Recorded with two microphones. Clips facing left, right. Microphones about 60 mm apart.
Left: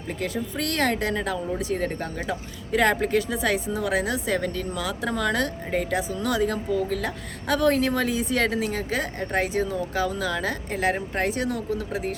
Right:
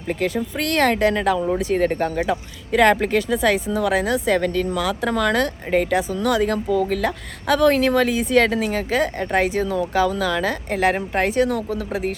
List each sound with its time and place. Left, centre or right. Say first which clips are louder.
0.3 s speech: right 3 dB; right
1.5 s speech: right 7 dB; right
9.6 s speech: right 6 dB; right